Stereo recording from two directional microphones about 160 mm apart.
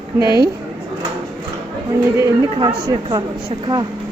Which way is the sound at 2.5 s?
30° right (ahead or behind).